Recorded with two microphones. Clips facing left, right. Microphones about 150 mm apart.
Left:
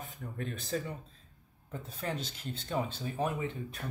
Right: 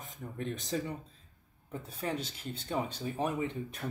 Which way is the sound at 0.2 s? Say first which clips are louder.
Right 3 dB; 20° right (ahead or behind).